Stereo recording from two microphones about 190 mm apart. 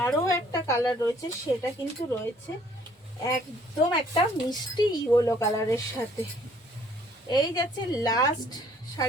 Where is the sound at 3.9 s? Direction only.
20° left (ahead or behind).